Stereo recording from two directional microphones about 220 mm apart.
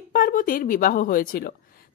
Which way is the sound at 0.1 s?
40° left (ahead or behind).